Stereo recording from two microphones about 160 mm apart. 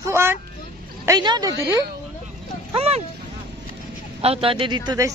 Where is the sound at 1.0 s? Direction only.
25° right (ahead or behind).